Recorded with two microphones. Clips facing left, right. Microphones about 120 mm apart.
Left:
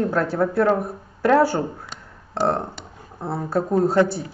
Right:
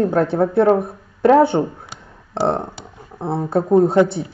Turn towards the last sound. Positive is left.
turn(degrees=-20)  # may be behind; listen again after turning